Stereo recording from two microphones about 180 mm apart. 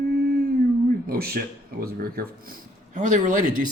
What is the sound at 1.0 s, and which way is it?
Speech, 55° right (ahead or behind).